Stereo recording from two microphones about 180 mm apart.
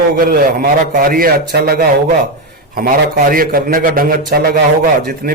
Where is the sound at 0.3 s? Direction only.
55° right (ahead or behind).